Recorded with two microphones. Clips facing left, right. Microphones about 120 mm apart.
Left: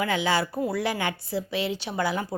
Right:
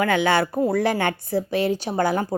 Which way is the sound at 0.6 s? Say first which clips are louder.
Right 6 dB; 50° right (ahead or behind).